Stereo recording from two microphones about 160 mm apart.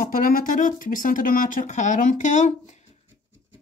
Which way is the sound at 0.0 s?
60° left (ahead or behind).